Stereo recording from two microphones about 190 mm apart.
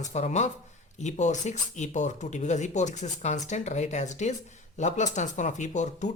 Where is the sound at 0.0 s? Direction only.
40° left (ahead or behind).